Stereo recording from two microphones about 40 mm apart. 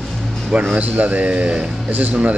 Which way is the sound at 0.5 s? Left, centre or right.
Right.